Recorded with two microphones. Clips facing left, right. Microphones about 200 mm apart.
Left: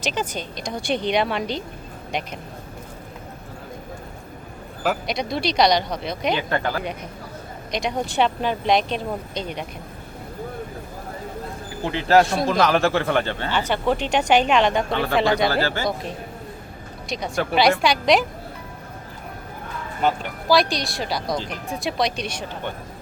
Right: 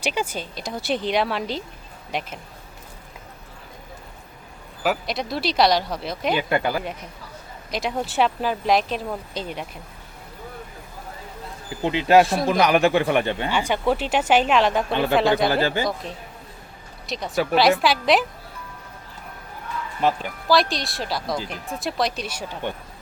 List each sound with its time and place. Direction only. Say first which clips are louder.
0.0 s speech: even; 10° right (ahead or behind)
4.8 s speech: even; centre (ahead or behind)
11.9 s speech: right 1 dB; 15° right (ahead or behind)
12.2 s speech: even; centre (ahead or behind)
12.5 s speech: right 1 dB; 15° right (ahead or behind)
15.4 s speech: right 1 dB; 20° right (ahead or behind)
17.1 s speech: right 2 dB; centre (ahead or behind)
20.0 s speech: even; centre (ahead or behind)